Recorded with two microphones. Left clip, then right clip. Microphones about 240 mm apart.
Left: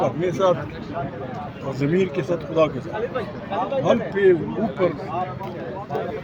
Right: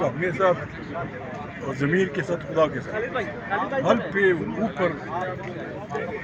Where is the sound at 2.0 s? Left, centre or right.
Centre.